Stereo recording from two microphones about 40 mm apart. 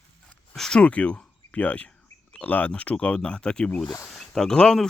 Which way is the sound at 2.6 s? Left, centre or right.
Left.